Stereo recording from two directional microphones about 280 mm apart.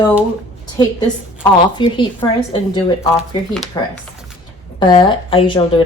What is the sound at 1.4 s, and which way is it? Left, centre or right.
A woman's voice, centre.